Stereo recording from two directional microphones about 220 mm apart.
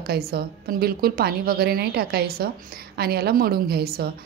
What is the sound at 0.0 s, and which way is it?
A woman's voice, 45° right (ahead or behind).